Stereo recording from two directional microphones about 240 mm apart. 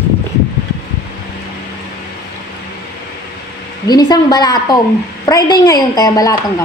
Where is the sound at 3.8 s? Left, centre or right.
Centre.